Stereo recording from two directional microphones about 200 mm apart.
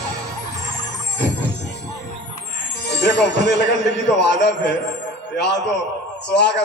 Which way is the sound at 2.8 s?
55° left (ahead or behind).